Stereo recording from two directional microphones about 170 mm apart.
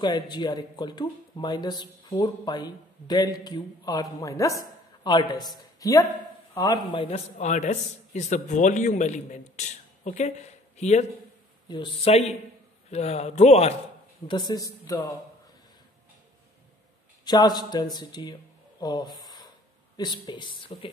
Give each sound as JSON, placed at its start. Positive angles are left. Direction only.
{"t": 0.0, "sound": "a man's voice", "side_deg": 25}
{"t": 7.3, "sound": "a man's voice", "side_deg": 45}
{"t": 14.2, "sound": "speech", "side_deg": 25}
{"t": 17.2, "sound": "speech", "side_deg": 25}